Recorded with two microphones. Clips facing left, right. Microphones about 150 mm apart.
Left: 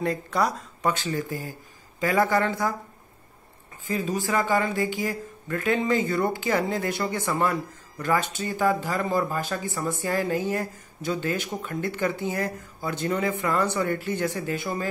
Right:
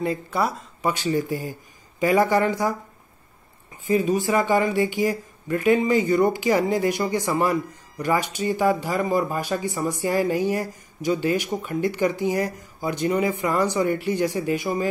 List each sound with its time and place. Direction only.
0.0 s speech: centre (ahead or behind)
0.9 s a man's voice: 15° right (ahead or behind)
3.8 s speech: 20° right (ahead or behind)